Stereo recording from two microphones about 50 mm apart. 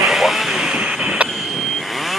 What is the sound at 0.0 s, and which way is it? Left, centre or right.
Vehicle, centre.